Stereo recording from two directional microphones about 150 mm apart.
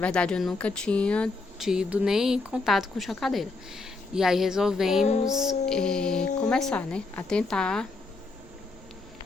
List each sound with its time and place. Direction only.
0.0 s speech: 5° left (ahead or behind)